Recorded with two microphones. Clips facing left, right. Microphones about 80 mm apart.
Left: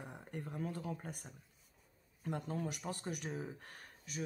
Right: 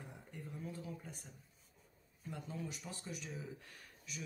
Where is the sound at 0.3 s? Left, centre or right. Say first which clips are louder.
Left 6 dB; left.